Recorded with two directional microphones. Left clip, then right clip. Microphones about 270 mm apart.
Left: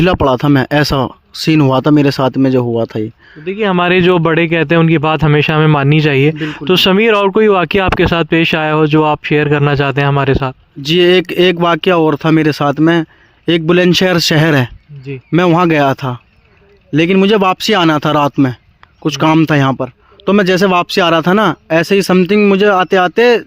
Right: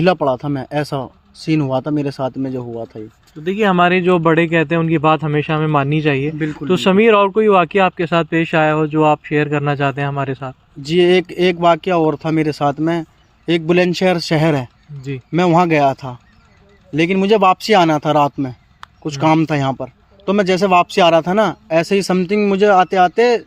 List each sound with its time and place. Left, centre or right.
0.0 s speech: left
3.4 s speech: centre
3.8 s speech: left